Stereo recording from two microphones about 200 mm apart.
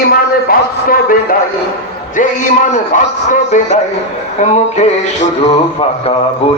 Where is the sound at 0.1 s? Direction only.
45° left (ahead or behind); by 6.2 s 30° left (ahead or behind).